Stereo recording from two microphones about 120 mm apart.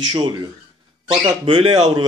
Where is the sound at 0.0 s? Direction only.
35° right (ahead or behind).